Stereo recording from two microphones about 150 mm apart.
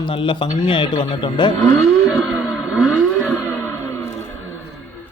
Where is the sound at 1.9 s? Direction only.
Centre (ahead or behind).